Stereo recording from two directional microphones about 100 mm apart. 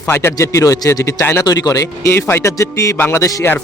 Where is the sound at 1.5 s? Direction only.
40° left (ahead or behind).